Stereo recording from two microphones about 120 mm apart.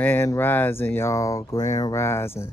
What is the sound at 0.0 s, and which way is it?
Speech, 20° left (ahead or behind).